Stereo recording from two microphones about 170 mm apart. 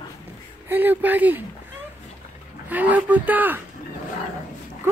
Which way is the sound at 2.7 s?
10° right (ahead or behind).